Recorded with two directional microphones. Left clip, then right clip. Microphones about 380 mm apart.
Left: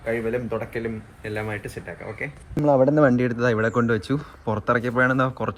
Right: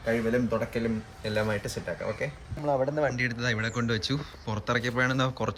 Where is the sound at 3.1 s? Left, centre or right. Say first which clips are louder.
Left 7 dB; centre.